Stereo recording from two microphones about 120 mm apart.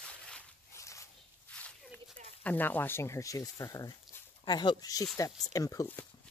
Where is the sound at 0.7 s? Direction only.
25° left (ahead or behind).